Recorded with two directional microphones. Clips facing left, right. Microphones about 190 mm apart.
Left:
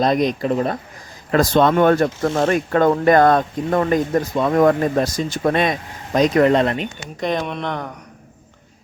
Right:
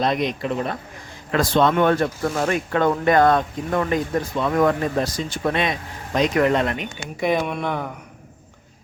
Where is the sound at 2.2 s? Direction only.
30° left (ahead or behind).